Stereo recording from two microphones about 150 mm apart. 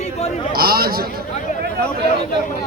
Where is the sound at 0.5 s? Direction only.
85° right.